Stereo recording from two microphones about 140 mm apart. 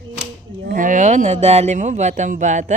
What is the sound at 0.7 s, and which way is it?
A woman's voice, 65° right (ahead or behind).